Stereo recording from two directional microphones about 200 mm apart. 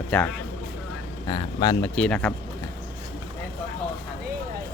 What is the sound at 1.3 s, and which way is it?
Speech, 20° left (ahead or behind).